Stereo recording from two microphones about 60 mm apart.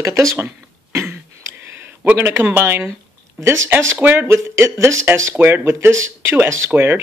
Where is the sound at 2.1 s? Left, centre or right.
Right.